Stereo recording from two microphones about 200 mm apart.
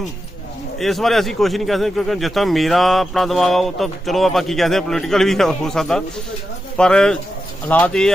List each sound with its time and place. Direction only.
0.8 s a man's voice: centre (ahead or behind)